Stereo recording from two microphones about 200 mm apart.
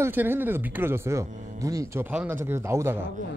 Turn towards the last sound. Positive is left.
turn(degrees=-15)  # may be behind; listen again after turning